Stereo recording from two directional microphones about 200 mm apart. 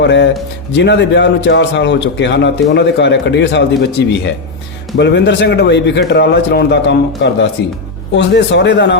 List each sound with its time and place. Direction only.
0.0 s a man's voice: 60° left (ahead or behind)